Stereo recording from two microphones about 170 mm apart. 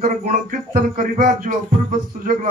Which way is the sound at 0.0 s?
55° right (ahead or behind).